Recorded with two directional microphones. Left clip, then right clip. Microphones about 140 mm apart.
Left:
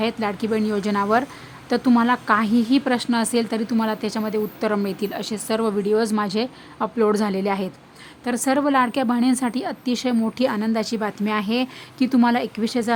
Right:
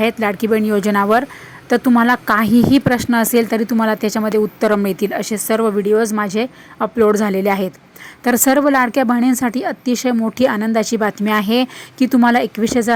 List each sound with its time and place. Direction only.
0.0 s a woman's voice: 20° right (ahead or behind)
8.2 s a woman's voice: 40° right (ahead or behind)